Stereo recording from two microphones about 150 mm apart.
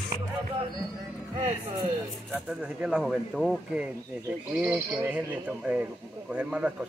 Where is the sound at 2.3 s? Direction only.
10° right (ahead or behind).